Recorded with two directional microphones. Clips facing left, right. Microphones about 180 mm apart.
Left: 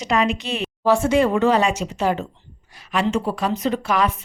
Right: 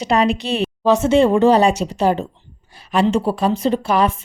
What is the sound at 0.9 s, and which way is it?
A woman's voice, 20° right (ahead or behind).